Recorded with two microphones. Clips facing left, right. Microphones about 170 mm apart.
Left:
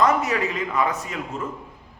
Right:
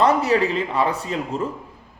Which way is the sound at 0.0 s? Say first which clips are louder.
Right 3 dB; 30° right (ahead or behind).